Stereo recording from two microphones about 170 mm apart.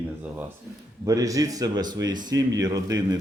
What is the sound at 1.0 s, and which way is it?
A man's voice, 20° right (ahead or behind).